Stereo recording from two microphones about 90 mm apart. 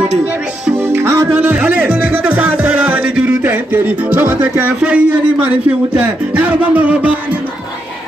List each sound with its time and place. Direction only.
0.7 s music: 25° right (ahead or behind)
1.4 s music: 20° right (ahead or behind)